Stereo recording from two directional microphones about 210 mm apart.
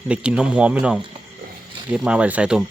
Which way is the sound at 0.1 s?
5° right (ahead or behind).